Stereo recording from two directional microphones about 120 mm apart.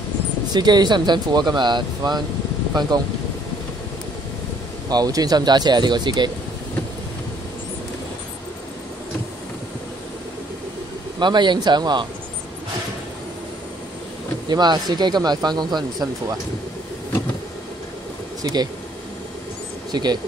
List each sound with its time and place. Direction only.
0.5 s speech: 35° right (ahead or behind)
4.8 s speech: 35° right (ahead or behind)
11.1 s speech: 40° right (ahead or behind)
14.5 s speech: 35° right (ahead or behind)
18.4 s speech: 35° right (ahead or behind)
19.9 s speech: 35° right (ahead or behind)